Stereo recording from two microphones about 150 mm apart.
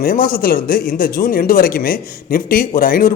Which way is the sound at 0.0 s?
70° left (ahead or behind).